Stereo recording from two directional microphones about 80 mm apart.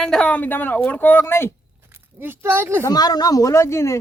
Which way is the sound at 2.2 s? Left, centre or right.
Right.